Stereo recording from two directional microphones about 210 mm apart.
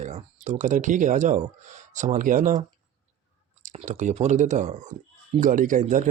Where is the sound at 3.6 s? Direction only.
35° right (ahead or behind).